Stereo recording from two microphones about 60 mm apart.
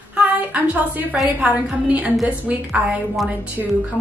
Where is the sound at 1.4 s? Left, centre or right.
Right.